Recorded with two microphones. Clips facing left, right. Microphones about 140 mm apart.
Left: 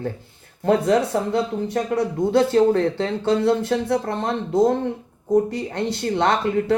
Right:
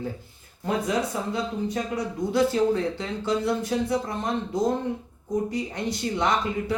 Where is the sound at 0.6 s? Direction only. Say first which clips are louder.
Left 8 dB; 60° left (ahead or behind).